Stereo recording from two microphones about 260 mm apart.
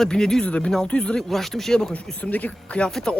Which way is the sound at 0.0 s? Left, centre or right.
Centre.